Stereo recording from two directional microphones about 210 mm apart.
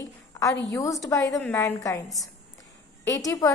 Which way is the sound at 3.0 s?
15° left (ahead or behind).